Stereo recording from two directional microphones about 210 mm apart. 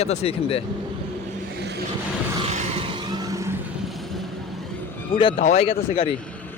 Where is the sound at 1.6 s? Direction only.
50° right (ahead or behind).